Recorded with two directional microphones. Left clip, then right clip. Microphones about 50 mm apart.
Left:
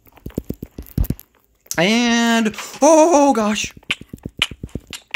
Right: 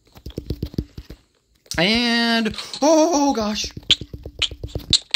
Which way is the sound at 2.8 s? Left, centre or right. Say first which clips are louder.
Left 5 dB; left.